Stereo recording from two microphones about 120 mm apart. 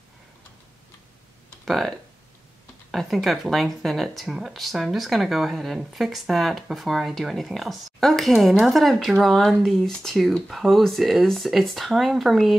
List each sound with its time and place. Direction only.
1.7 s speech: centre (ahead or behind)